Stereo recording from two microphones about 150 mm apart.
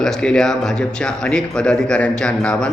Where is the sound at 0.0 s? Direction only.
5° left (ahead or behind).